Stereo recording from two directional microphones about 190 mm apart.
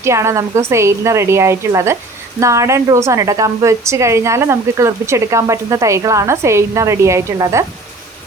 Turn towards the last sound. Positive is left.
turn(degrees=-15)  # may be behind; listen again after turning